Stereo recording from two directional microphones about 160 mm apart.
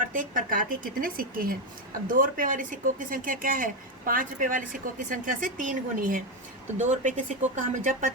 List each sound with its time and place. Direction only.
0.1 s speech: 55° right (ahead or behind)